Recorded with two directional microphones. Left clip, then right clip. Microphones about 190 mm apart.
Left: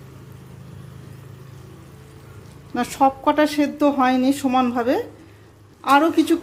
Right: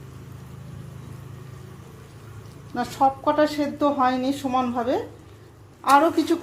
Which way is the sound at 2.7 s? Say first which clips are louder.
Left 3 dB; 30° left (ahead or behind).